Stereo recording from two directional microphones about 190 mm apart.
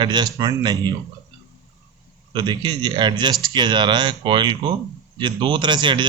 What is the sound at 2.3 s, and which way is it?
Speech, 20° right (ahead or behind).